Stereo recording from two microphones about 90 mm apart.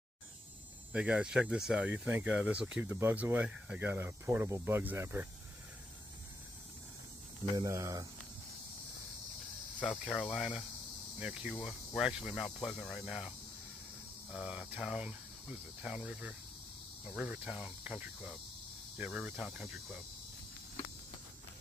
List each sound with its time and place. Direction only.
0.9 s speech: 15° right (ahead or behind)
2.9 s speech: 25° right (ahead or behind)
3.9 s speech: 25° right (ahead or behind)
7.5 s speech: 40° right (ahead or behind)
9.8 s speech: 5° left (ahead or behind)
12.5 s speech: 5° left (ahead or behind)
14.3 s speech: 10° right (ahead or behind)